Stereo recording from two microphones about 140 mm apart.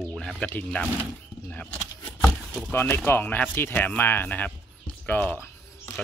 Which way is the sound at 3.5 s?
15° left (ahead or behind).